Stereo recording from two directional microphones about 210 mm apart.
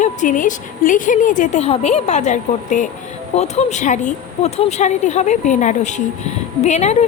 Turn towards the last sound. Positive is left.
turn(degrees=30)  # may be behind; listen again after turning